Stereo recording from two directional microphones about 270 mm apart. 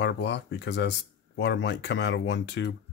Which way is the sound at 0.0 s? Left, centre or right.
Left.